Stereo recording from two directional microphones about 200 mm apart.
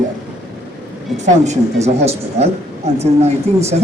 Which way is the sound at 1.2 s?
35° right (ahead or behind).